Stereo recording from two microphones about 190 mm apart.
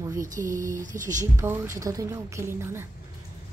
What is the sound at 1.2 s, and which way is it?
A woman's voice, 15° right (ahead or behind).